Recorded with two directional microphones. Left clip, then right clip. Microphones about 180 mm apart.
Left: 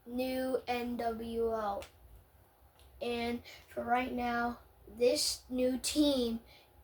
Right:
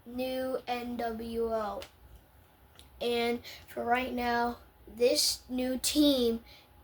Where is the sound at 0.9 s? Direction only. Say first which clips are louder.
Right 1 dB; 10° right (ahead or behind).